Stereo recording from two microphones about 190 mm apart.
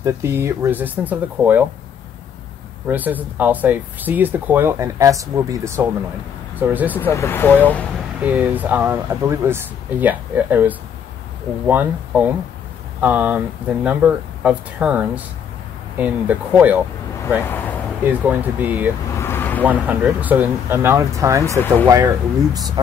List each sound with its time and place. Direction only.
0.0 s speech: 15° right (ahead or behind)
2.9 s speech: 10° right (ahead or behind)
7.0 s speech: 15° left (ahead or behind)
8.2 s speech: 10° right (ahead or behind)
17.4 s speech: 10° left (ahead or behind)
18.0 s speech: 10° right (ahead or behind)
19.1 s vehicle: 10° left (ahead or behind)
19.6 s speech: 10° right (ahead or behind)